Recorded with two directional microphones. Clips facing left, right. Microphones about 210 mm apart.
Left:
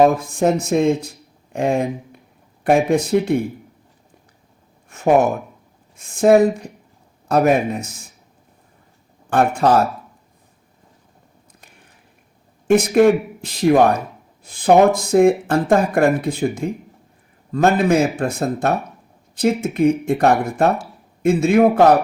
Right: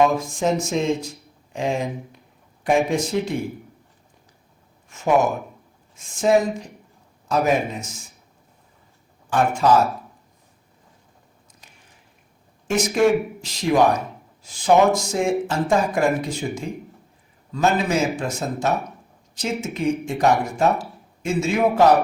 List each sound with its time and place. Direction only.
0.2 s speech: 55° left (ahead or behind)
4.9 s speech: 55° left (ahead or behind)
9.3 s speech: 60° left (ahead or behind)
12.6 s speech: 60° left (ahead or behind)